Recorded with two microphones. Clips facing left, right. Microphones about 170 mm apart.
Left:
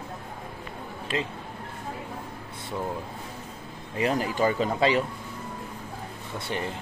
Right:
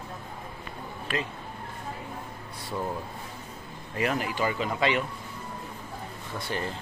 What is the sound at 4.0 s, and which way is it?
Speech, 30° left (ahead or behind).